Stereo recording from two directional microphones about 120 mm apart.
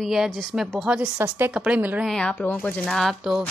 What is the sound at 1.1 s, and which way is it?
Speech, 15° right (ahead or behind).